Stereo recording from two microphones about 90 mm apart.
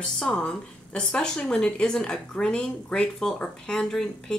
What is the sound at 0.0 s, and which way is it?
A woman's voice, 10° left (ahead or behind).